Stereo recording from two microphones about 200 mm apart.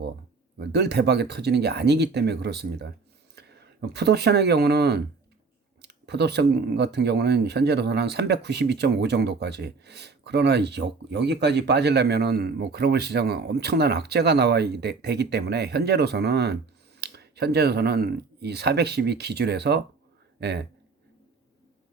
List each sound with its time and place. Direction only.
0.6 s speech: 55° right (ahead or behind)